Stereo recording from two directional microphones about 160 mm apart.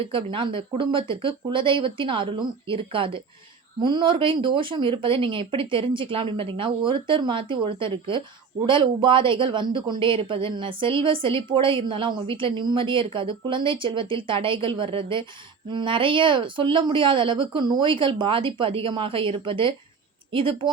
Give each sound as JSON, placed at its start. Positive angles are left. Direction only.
{"t": 0.0, "sound": "speech", "side_deg": -35}